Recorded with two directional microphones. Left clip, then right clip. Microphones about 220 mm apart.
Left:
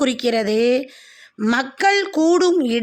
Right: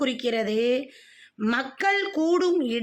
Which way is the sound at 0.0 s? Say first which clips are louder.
Left 7 dB; 30° left (ahead or behind).